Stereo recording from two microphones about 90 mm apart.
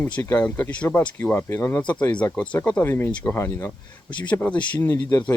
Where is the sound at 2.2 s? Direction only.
15° left (ahead or behind).